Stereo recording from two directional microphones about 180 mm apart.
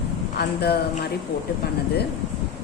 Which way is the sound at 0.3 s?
60° left (ahead or behind).